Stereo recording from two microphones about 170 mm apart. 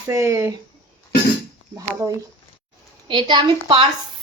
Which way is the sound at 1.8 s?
20° right (ahead or behind).